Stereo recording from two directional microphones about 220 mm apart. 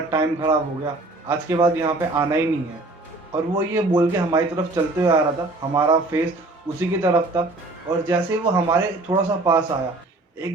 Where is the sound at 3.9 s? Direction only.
20° right (ahead or behind).